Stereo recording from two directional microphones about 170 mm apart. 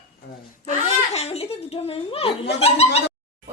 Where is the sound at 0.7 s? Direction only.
40° left (ahead or behind).